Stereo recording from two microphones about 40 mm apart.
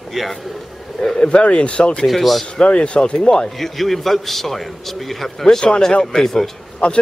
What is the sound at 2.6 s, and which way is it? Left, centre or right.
Speech, left.